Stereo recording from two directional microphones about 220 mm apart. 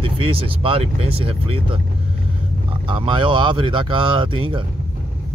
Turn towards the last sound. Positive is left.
turn(degrees=-25)  # may be behind; listen again after turning